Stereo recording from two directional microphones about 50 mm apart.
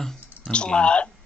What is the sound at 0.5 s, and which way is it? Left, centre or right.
Speech, left.